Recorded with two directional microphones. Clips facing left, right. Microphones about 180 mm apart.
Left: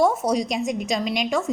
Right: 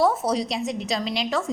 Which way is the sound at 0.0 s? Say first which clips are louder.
Left 1 dB; 15° left (ahead or behind).